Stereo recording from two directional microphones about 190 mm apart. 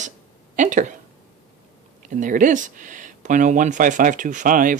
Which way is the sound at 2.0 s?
45° right (ahead or behind).